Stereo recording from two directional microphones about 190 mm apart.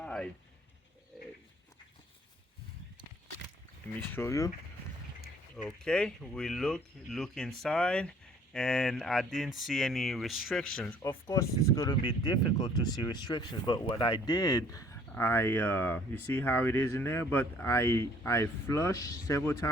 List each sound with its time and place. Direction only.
0.0 s a sound: 5° left (ahead or behind)
4.1 s speech: 15° left (ahead or behind)
5.6 s speech: 5° left (ahead or behind)